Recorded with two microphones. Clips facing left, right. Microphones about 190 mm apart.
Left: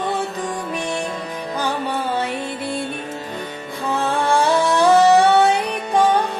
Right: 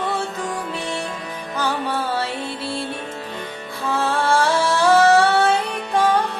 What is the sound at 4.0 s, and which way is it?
Music, 15° left (ahead or behind).